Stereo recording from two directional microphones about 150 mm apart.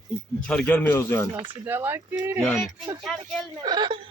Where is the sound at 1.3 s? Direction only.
30° right (ahead or behind).